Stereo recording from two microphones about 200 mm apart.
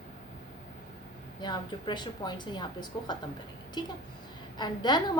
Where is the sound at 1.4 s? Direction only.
20° left (ahead or behind).